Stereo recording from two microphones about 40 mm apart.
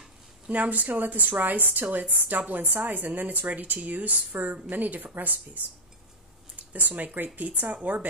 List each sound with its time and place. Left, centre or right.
0.5 s a woman's voice: right
3.4 s a woman's voice: right
6.7 s a woman's voice: right